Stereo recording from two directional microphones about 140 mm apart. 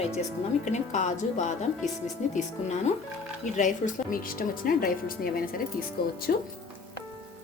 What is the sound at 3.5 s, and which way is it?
Speech, 65° left (ahead or behind).